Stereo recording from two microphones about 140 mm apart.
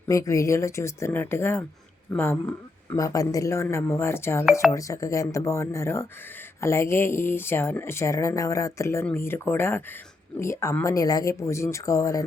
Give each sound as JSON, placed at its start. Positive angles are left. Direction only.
{"t": 0.1, "sound": "speech", "side_deg": 20}
{"t": 3.0, "sound": "speech", "side_deg": 25}